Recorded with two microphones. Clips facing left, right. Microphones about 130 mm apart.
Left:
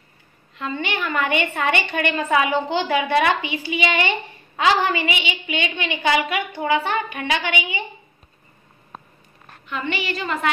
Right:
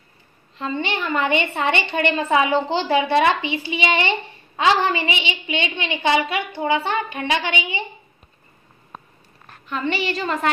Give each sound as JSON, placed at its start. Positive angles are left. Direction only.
{"t": 0.6, "sound": "a woman's voice", "side_deg": -30}
{"t": 9.7, "sound": "a woman's voice", "side_deg": -35}